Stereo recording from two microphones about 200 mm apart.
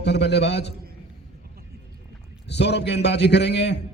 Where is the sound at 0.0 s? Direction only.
60° left (ahead or behind).